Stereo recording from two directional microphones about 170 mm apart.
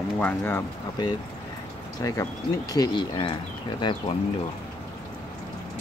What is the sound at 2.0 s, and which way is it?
Speech, 20° left (ahead or behind).